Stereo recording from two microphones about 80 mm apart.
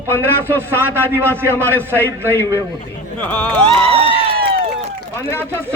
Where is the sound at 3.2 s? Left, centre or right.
Centre.